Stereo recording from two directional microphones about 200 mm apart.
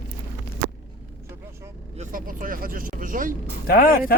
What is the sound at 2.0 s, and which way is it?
Speech, 40° right (ahead or behind).